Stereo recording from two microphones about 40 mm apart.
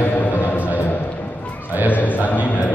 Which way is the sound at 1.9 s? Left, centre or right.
Left.